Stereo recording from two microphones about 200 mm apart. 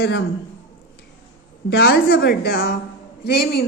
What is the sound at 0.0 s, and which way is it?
Speech, 60° left (ahead or behind).